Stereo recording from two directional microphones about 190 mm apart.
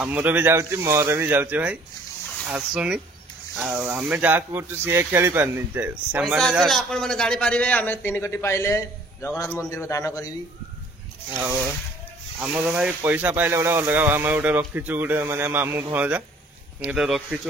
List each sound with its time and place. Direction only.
0.0 s a man's voice: 10° right (ahead or behind); by 10.3 s 15° left (ahead or behind)
11.3 s a man's voice: 10° right (ahead or behind)